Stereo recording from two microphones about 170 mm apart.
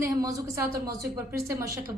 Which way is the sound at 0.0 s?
20° right (ahead or behind).